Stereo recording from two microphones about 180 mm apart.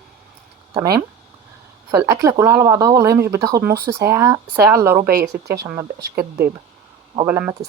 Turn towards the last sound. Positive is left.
turn(degrees=-10)  # may be behind; listen again after turning